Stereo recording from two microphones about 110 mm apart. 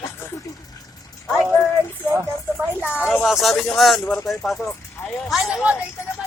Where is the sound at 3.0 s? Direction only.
5° right (ahead or behind).